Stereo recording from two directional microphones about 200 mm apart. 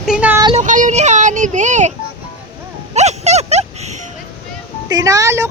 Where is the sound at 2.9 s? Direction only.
35° right (ahead or behind).